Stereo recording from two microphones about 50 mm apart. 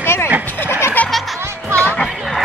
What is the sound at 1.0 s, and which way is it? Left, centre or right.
Music, left.